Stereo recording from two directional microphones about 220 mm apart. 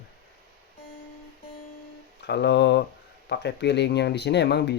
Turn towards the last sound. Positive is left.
turn(degrees=50)  # may be behind; listen again after turning